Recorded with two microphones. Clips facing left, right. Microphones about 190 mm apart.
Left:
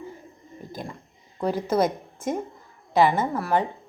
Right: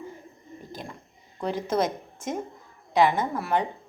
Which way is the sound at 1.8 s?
55° left (ahead or behind).